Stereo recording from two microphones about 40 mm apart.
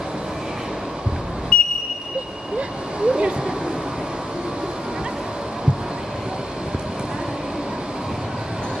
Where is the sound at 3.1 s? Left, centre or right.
Right.